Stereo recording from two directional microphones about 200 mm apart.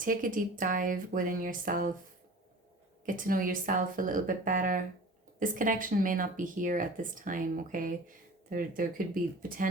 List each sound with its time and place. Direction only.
0.0 s speech: 45° right (ahead or behind)
3.1 s speech: 45° right (ahead or behind)